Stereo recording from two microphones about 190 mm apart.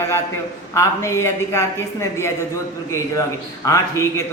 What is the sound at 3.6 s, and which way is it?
Mantra, 15° left (ahead or behind).